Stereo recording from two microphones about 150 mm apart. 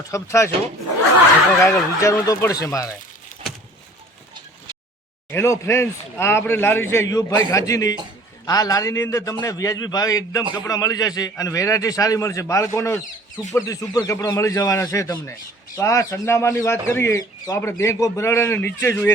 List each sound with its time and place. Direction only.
0.1 s speech: 20° left (ahead or behind)
1.6 s speech: 20° left (ahead or behind)
5.3 s speech: 20° left (ahead or behind)